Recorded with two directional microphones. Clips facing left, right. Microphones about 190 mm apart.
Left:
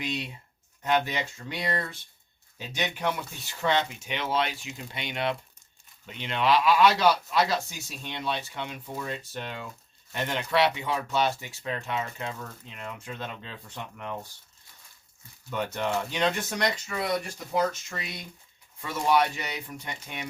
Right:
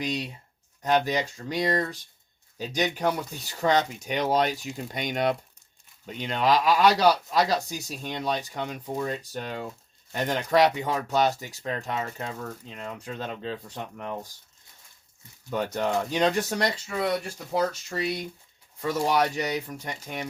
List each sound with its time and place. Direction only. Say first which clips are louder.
0.0 s speech: right 3 dB; 40° right (ahead or behind)
15.4 s speech: right 3 dB; 40° right (ahead or behind)